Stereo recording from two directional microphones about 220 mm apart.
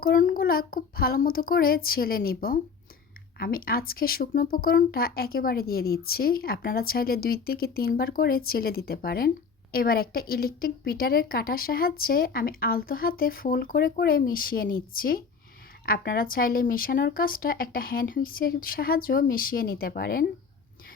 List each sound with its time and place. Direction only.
0.0 s a woman's voice: 40° left (ahead or behind)